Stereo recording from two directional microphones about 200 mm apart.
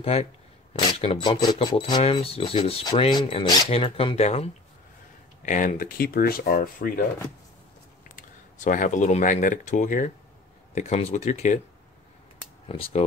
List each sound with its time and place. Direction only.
0.0 s speech: 30° left (ahead or behind); by 6.9 s 45° left (ahead or behind)
8.2 s speech: 40° left (ahead or behind)
12.6 s speech: 30° left (ahead or behind)